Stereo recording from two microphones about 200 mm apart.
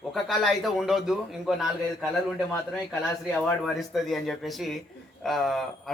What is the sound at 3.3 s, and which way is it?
A man's voice, centre (ahead or behind).